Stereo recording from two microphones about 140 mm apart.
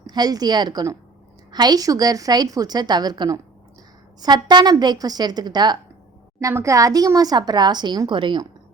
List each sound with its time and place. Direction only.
0.1 s speech: 30° right (ahead or behind)